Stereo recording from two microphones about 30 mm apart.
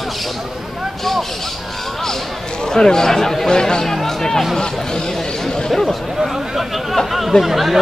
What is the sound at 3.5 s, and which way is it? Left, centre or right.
Speech, left.